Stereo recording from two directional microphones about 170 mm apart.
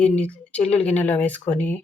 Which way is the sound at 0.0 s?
5° left (ahead or behind).